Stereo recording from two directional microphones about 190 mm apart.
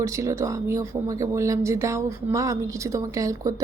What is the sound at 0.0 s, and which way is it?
Speech, 15° right (ahead or behind).